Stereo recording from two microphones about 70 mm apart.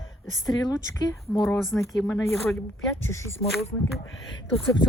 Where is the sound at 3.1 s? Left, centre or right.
Left.